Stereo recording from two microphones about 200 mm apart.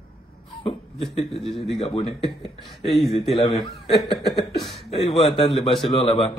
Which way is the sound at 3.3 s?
20° left (ahead or behind).